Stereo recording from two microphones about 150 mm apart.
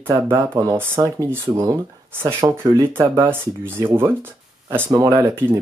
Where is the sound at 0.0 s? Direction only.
15° right (ahead or behind).